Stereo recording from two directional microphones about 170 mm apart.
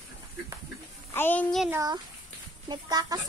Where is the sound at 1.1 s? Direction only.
10° left (ahead or behind).